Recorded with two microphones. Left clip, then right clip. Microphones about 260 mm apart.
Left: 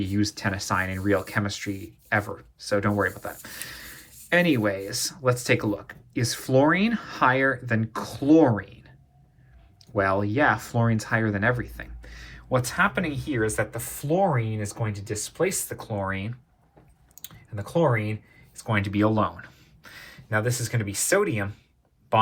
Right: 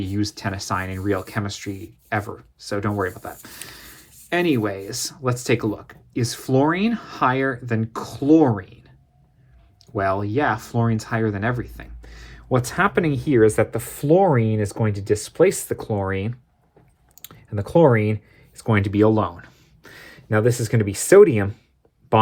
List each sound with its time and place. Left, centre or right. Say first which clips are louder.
0.0 s speech: right 1 dB; right
17.5 s speech: right 8 dB; right